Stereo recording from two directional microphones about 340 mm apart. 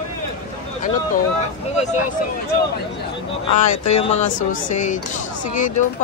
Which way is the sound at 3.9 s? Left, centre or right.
Centre.